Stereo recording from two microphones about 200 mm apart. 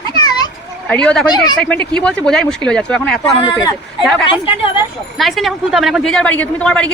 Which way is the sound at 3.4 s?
20° left (ahead or behind).